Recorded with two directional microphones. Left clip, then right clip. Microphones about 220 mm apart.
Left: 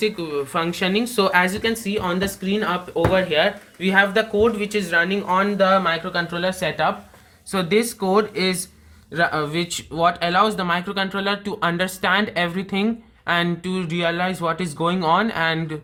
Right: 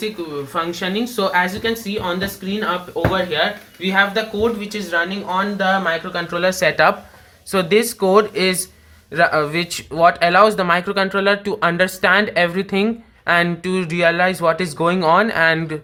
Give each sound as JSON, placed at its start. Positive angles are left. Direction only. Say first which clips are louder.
{"t": 0.5, "sound": "speech", "louder": "right 1 dB", "side_deg": 55}
{"t": 6.7, "sound": "speech", "louder": "right 7 dB", "side_deg": -10}